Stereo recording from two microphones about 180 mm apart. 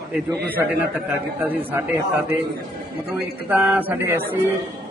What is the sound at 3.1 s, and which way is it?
A man's voice, 10° right (ahead or behind).